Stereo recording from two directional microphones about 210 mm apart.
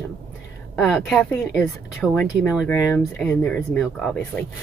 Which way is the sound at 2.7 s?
15° left (ahead or behind).